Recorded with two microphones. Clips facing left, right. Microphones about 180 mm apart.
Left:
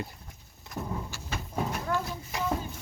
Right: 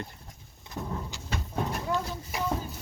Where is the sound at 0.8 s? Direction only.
Centre (ahead or behind).